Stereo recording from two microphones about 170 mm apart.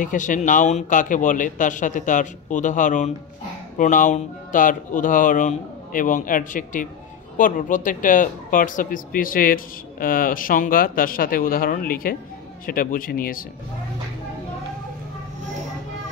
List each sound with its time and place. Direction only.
0.0 s speech: 50° left (ahead or behind)